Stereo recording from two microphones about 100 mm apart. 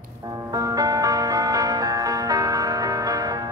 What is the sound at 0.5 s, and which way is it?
Music, 35° right (ahead or behind).